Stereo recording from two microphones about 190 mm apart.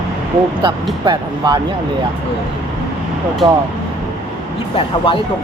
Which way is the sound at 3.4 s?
25° right (ahead or behind).